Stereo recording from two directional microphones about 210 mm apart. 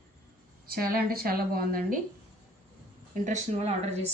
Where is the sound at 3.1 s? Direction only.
35° right (ahead or behind).